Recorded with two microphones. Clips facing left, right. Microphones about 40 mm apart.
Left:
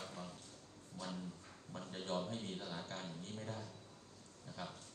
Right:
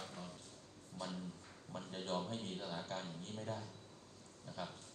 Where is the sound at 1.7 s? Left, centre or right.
Right.